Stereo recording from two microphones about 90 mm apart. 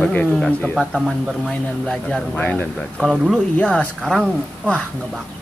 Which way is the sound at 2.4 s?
15° left (ahead or behind).